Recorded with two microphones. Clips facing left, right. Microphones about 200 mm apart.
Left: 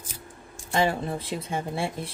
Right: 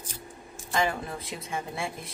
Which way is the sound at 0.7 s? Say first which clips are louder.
Left 4 dB; 30° left (ahead or behind).